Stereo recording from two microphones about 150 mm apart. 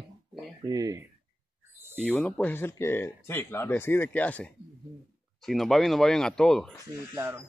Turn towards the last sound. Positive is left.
turn(degrees=-15)  # may be behind; listen again after turning